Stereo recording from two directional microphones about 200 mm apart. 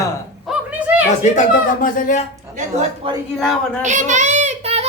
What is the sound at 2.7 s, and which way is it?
Speech, 30° right (ahead or behind).